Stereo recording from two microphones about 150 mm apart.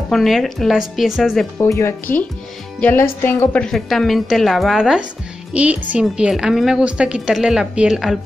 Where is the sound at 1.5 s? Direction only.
20° left (ahead or behind).